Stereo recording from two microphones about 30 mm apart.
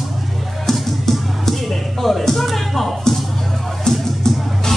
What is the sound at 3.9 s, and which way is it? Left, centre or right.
Music, centre.